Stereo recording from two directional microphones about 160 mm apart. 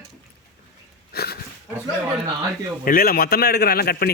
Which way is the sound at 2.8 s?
65° left (ahead or behind).